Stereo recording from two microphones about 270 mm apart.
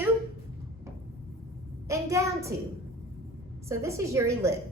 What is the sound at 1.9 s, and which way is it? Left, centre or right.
Speech, centre.